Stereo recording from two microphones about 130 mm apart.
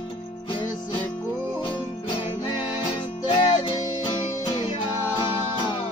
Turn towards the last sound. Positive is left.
turn(degrees=35)  # may be behind; listen again after turning